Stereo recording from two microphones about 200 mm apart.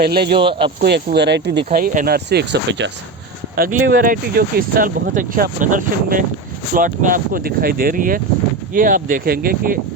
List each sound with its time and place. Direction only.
0.0 s speech: 50° right (ahead or behind)
0.3 s speech: 25° right (ahead or behind)
0.8 s speech: 55° right (ahead or behind)
3.5 s speech: 50° right (ahead or behind)